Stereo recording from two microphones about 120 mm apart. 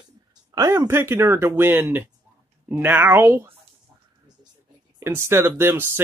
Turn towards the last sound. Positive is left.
turn(degrees=-20)  # may be behind; listen again after turning